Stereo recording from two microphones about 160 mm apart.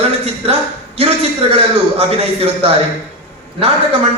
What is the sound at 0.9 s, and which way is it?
A man's voice, 40° right (ahead or behind).